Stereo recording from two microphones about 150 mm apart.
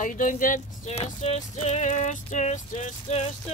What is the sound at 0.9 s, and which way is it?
Music, 45° left (ahead or behind).